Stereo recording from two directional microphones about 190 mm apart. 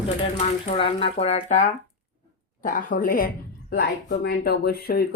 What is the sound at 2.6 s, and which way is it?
A woman's voice, 45° left (ahead or behind).